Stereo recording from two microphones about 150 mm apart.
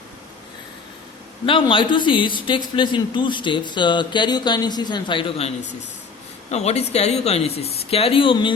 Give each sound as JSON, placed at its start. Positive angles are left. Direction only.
{"t": 1.5, "sound": "a man's voice", "side_deg": 35}
{"t": 6.5, "sound": "speech", "side_deg": 45}